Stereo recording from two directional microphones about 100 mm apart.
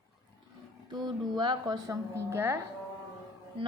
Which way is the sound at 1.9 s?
25° right (ahead or behind).